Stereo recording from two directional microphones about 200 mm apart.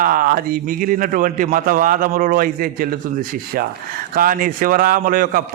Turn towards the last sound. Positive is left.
turn(degrees=-45)  # may be behind; listen again after turning